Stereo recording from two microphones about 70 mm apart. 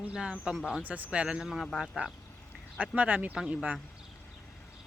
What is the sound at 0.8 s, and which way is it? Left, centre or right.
Speech, right.